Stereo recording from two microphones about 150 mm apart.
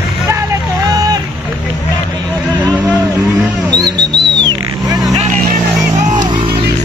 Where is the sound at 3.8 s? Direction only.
25° right (ahead or behind).